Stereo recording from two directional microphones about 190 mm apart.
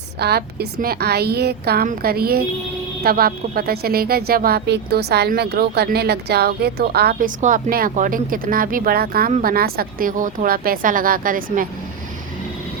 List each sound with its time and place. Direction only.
0.2 s a woman's voice: 60° right (ahead or behind)